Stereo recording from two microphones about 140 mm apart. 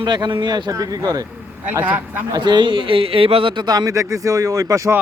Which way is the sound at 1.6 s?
10° right (ahead or behind).